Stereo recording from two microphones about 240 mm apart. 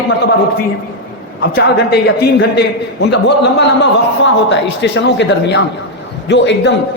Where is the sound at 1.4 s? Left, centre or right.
Left.